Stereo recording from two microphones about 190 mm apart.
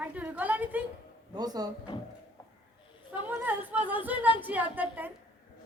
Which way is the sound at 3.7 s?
25° left (ahead or behind).